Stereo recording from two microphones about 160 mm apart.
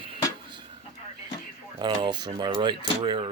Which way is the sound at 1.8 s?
30° right (ahead or behind).